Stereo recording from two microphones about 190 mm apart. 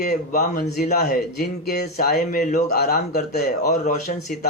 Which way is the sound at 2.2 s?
40° left (ahead or behind).